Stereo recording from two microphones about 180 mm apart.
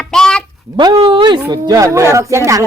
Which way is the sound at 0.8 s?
25° right (ahead or behind).